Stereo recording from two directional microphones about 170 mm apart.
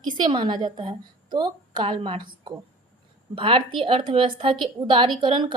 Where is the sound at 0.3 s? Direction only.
25° right (ahead or behind).